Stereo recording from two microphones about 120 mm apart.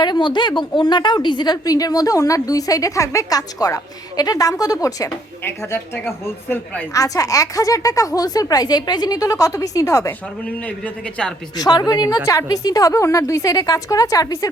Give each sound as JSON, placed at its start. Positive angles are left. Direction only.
{"t": 0.0, "sound": "a woman's voice", "side_deg": 40}
{"t": 7.0, "sound": "a woman's voice", "side_deg": 30}
{"t": 10.8, "sound": "a man's voice", "side_deg": 5}
{"t": 11.5, "sound": "a woman's voice", "side_deg": 35}